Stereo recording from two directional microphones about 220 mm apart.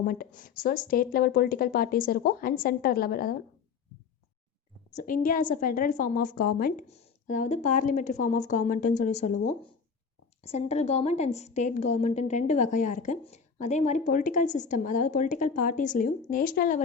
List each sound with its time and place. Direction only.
0.0 s a woman's voice: 40° left (ahead or behind)
4.9 s a woman's voice: 40° left (ahead or behind)